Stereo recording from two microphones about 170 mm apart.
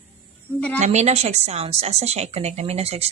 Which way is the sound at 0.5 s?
10° left (ahead or behind).